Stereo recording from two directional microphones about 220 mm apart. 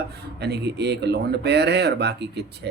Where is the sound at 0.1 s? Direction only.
50° right (ahead or behind).